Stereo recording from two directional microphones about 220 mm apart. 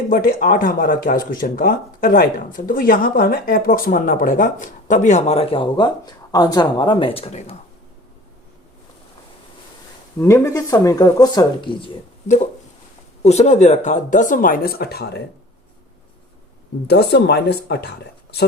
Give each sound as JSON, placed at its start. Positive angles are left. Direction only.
{"t": 0.1, "sound": "speech", "side_deg": 40}
{"t": 10.2, "sound": "speech", "side_deg": 10}
{"t": 13.2, "sound": "speech", "side_deg": 30}
{"t": 16.8, "sound": "speech", "side_deg": 50}